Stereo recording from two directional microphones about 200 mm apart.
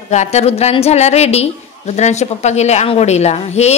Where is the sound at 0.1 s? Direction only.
35° left (ahead or behind).